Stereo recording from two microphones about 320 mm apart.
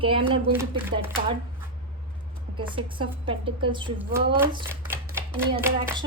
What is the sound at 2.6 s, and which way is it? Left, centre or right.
Speech, centre.